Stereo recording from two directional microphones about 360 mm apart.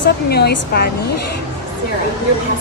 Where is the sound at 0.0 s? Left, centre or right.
Left.